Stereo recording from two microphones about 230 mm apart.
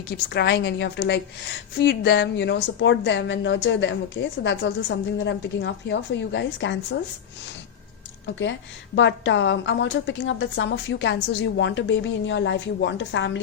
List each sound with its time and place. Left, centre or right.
0.1 s a woman's voice: left
9.0 s a woman's voice: left